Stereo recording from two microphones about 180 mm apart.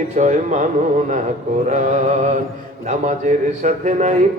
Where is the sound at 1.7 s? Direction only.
40° right (ahead or behind).